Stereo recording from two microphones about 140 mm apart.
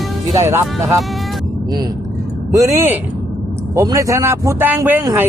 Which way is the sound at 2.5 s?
20° right (ahead or behind).